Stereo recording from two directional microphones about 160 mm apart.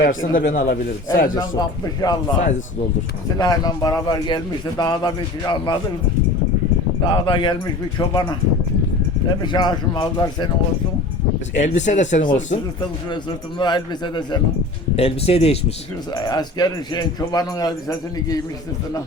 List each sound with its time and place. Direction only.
0.0 s speech: 60° left (ahead or behind)
1.4 s a man's voice: 25° left (ahead or behind)
3.3 s a man's voice: 25° left (ahead or behind)
7.0 s a man's voice: 30° left (ahead or behind)
9.4 s a man's voice: 25° left (ahead or behind)
11.5 s speech: 50° left (ahead or behind)
13.6 s a man's voice: 25° left (ahead or behind)
14.9 s speech: 40° left (ahead or behind)
16.1 s a man's voice: 25° left (ahead or behind)